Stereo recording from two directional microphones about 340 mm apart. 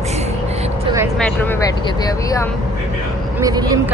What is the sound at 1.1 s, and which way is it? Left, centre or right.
Speech, centre.